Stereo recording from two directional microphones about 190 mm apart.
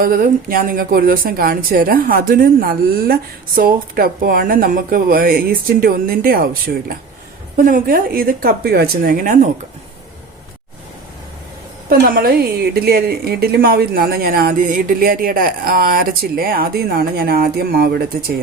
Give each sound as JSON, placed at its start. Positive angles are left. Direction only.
{"t": 0.0, "sound": "a woman's voice", "side_deg": -50}
{"t": 11.9, "sound": "a woman's voice", "side_deg": -50}